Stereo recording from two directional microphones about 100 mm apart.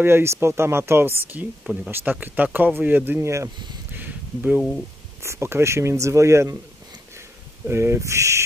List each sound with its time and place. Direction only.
0.0 s speech: 25° right (ahead or behind)
3.9 s a sound: 15° right (ahead or behind)
5.2 s speech: 25° right (ahead or behind)
7.6 s speech: 25° right (ahead or behind)